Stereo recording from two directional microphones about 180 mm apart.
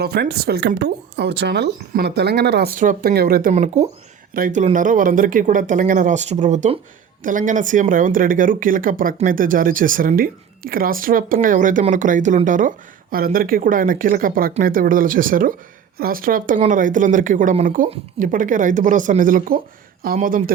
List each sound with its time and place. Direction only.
0.0 s speech: 65° right (ahead or behind)
3.5 s speech: 40° right (ahead or behind)